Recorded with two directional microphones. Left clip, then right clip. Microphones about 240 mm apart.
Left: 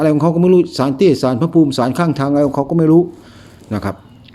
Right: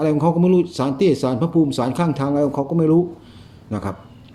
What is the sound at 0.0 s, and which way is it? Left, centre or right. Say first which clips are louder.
Speech: left 5 dB; left.